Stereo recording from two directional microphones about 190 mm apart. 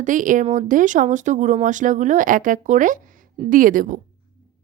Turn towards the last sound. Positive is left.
turn(degrees=-45)  # may be behind; listen again after turning